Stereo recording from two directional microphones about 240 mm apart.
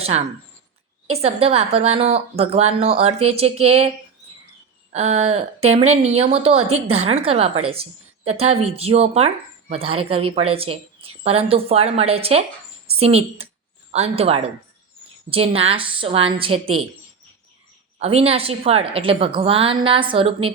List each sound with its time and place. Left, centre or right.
1.0 s speech: right
4.9 s a woman's voice: right
18.0 s speech: right